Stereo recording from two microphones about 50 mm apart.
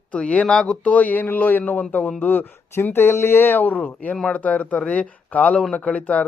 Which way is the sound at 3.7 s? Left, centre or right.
Left.